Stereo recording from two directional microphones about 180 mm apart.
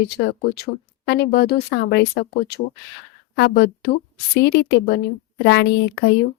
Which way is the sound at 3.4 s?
65° left (ahead or behind).